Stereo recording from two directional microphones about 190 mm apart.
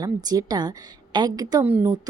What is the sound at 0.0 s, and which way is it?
A woman's voice, 20° right (ahead or behind).